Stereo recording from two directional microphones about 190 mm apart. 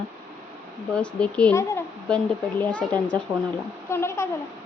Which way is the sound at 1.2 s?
5° left (ahead or behind).